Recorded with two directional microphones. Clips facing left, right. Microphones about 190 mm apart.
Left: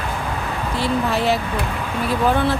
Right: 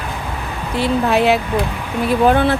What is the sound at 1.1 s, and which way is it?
Speech, 65° right (ahead or behind).